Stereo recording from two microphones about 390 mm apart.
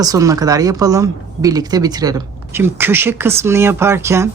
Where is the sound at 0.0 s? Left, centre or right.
Centre.